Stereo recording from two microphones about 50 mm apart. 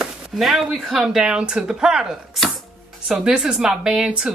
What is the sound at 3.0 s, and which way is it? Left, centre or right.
Speech, centre.